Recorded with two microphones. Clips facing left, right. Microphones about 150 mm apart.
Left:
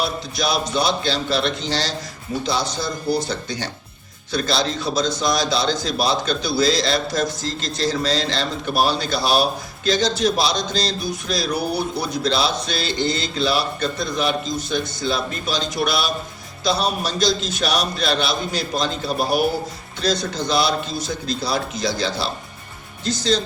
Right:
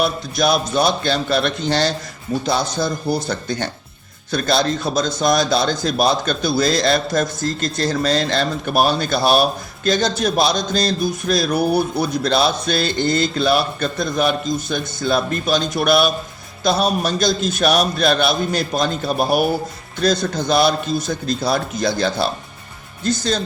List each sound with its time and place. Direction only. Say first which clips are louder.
0.0 s a man's voice: right 5 dB; 50° right (ahead or behind)